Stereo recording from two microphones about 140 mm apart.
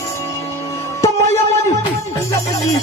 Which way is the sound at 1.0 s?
20° left (ahead or behind).